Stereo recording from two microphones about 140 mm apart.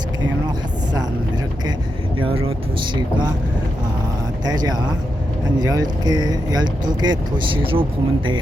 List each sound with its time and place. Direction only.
2.1 s speech: 40° right (ahead or behind)
4.4 s speech: 30° right (ahead or behind)